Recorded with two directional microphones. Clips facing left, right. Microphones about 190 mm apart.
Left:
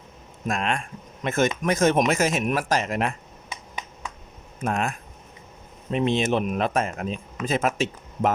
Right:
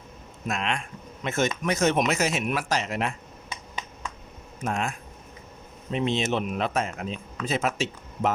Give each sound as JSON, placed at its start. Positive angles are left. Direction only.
{"t": 0.4, "sound": "speech", "side_deg": 50}
{"t": 4.6, "sound": "speech", "side_deg": 55}